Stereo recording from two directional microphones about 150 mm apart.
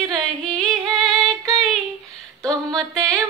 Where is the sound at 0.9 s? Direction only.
Centre (ahead or behind).